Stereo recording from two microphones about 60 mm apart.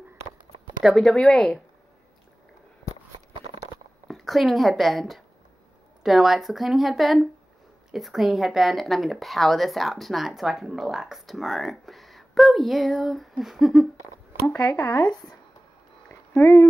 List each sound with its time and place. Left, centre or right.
0.8 s speech: centre
4.1 s a woman's voice: centre
14.6 s speech: left
16.1 s a sound: left